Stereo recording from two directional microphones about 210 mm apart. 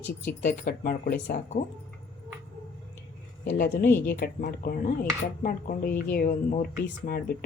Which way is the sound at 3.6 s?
40° left (ahead or behind).